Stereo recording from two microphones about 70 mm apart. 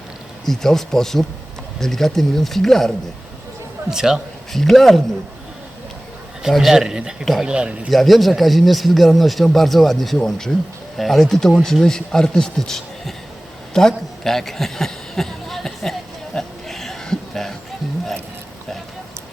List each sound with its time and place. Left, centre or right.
0.4 s a man's voice: centre
3.8 s speech: centre
6.4 s a man's voice: centre
7.9 s a man's voice: centre
13.7 s a sound: centre